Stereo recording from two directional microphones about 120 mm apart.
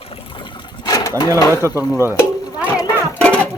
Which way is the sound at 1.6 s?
25° right (ahead or behind).